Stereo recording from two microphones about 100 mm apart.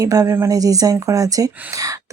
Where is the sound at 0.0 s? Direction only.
35° right (ahead or behind).